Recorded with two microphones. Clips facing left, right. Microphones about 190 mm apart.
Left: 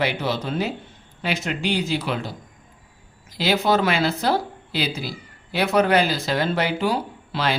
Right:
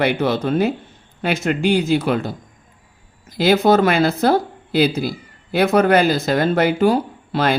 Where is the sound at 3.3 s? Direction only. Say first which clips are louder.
Right 6 dB; 50° right (ahead or behind).